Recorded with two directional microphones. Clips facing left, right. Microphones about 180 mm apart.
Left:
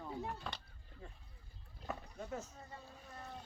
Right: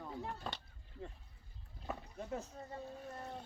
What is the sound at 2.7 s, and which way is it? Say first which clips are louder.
Boat: right 9 dB; 45° right (ahead or behind).